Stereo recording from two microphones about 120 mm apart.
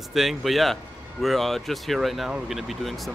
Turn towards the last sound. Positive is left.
turn(degrees=0)  # may be behind; listen again after turning